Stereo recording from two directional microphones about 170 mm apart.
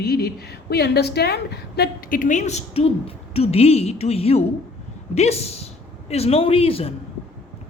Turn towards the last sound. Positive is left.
turn(degrees=35)  # may be behind; listen again after turning